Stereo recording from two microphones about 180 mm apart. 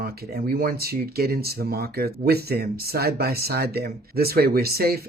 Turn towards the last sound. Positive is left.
turn(degrees=-60)  # may be behind; listen again after turning